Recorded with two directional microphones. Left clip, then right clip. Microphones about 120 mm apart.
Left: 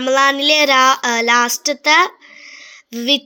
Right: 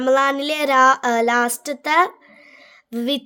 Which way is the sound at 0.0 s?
50° right (ahead or behind).